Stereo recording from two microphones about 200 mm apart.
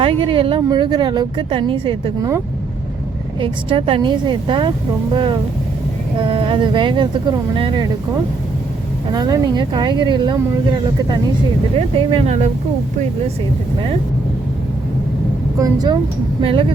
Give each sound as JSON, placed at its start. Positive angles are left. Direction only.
{"t": 0.0, "sound": "speech", "side_deg": -25}
{"t": 3.4, "sound": "speech", "side_deg": -25}
{"t": 9.1, "sound": "speech", "side_deg": -20}
{"t": 11.8, "sound": "speech", "side_deg": -35}
{"t": 15.5, "sound": "speech", "side_deg": -20}